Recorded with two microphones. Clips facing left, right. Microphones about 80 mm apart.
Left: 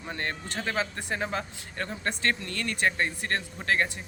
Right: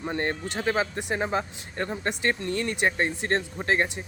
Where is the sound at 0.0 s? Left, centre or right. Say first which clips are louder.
Right 6 dB; right.